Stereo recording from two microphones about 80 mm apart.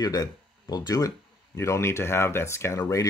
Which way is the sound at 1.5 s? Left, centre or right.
Left.